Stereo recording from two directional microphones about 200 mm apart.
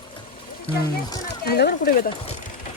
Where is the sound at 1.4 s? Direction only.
50° left (ahead or behind).